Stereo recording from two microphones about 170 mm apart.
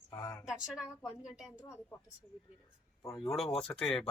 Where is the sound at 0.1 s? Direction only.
20° left (ahead or behind).